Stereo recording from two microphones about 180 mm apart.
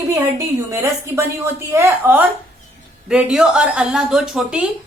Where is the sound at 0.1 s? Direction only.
15° right (ahead or behind).